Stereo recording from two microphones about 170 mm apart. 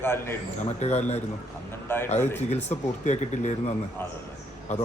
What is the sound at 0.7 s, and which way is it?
Speech, 40° left (ahead or behind).